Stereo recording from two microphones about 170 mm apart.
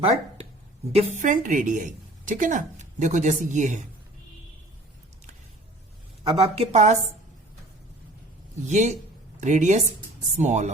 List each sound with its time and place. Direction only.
0.9 s a woman's voice: 50° right (ahead or behind)
6.4 s a woman's voice: 40° right (ahead or behind)
8.6 s a woman's voice: 45° right (ahead or behind)